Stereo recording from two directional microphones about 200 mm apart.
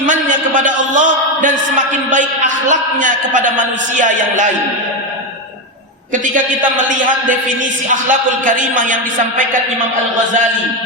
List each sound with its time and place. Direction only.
0.0 s a sound: 40° right (ahead or behind)
2.6 s a man's voice: 40° right (ahead or behind)
6.8 s a man's voice: 40° right (ahead or behind)